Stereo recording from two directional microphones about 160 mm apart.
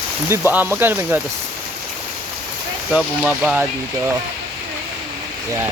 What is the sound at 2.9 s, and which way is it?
Speech, 5° right (ahead or behind).